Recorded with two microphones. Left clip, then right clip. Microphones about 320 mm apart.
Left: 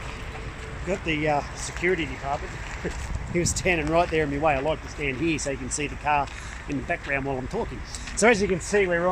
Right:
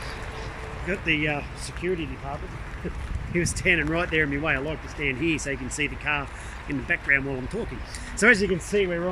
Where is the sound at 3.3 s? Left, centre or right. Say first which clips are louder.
Right 1 dB; centre.